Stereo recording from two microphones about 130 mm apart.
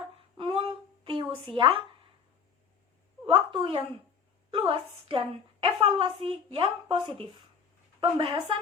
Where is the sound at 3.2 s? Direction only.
40° right (ahead or behind).